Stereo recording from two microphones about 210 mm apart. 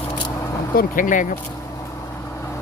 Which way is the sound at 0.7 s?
40° left (ahead or behind).